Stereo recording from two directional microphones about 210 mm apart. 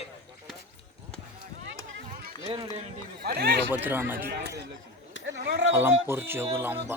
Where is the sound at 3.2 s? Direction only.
50° right (ahead or behind).